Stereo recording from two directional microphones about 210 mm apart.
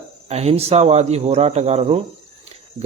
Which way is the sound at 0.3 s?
30° right (ahead or behind).